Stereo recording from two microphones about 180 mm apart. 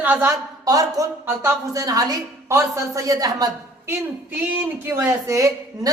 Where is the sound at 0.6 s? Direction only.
20° right (ahead or behind).